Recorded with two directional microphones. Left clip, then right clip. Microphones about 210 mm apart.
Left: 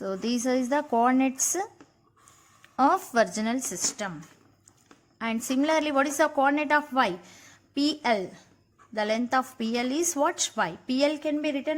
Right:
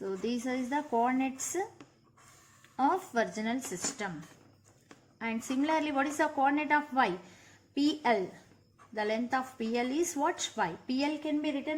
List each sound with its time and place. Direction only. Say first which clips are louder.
0.0 s speech: left 6 dB; 45° left (ahead or behind)
5.2 s a woman's voice: left 6 dB; 40° left (ahead or behind)